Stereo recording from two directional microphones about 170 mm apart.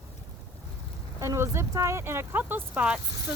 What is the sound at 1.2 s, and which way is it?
Speech, 15° right (ahead or behind).